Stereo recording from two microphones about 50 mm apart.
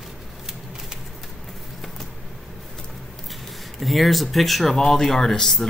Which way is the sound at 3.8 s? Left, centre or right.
Centre.